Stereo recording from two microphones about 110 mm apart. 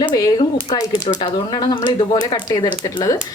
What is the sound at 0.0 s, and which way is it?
Speech, 40° left (ahead or behind).